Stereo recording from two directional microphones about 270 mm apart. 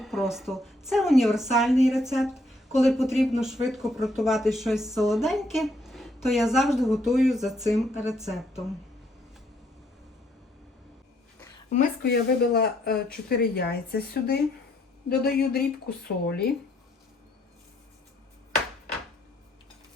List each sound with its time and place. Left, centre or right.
0.0 s speech: centre
11.7 s speech: left